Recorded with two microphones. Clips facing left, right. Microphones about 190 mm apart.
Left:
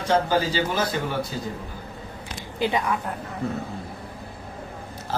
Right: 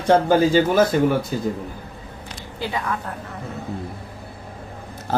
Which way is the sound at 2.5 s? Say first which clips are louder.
Left 3 dB; 20° left (ahead or behind).